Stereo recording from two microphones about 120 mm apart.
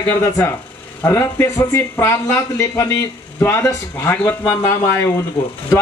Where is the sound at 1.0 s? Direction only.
20° left (ahead or behind).